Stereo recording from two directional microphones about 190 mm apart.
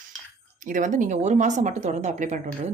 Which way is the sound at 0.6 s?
45° right (ahead or behind).